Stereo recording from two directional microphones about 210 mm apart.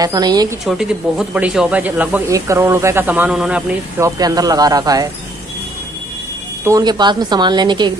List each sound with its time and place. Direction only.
0.0 s a woman's voice: 20° right (ahead or behind)
0.7 s speech: centre (ahead or behind)
4.0 s speech: 15° right (ahead or behind)
6.6 s a woman's voice: 15° right (ahead or behind)